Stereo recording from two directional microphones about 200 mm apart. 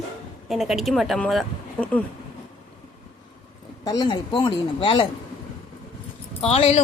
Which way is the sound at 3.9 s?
20° left (ahead or behind).